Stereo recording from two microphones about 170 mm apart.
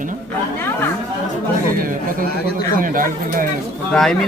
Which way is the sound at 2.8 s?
55° right (ahead or behind).